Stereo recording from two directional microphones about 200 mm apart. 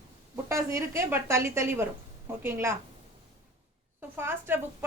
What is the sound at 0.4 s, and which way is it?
A woman's voice, 15° right (ahead or behind).